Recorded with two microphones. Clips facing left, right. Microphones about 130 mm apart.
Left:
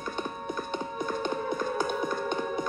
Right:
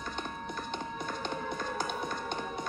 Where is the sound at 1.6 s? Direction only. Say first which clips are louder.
Left 6 dB; 50° left (ahead or behind).